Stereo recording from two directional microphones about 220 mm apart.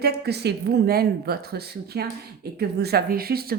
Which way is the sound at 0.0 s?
50° right (ahead or behind).